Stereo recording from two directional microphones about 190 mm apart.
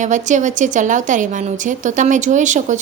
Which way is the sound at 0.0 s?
40° right (ahead or behind).